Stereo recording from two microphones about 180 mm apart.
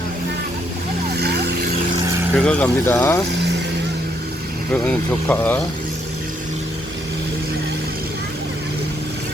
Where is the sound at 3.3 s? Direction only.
70° right (ahead or behind).